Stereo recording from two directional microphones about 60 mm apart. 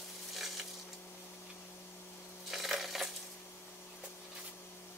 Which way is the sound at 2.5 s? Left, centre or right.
Centre.